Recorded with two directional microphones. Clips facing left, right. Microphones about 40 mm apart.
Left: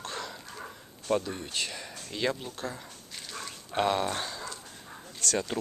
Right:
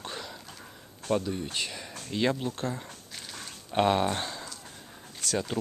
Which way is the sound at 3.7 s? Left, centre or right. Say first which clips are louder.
Right 3 dB; centre.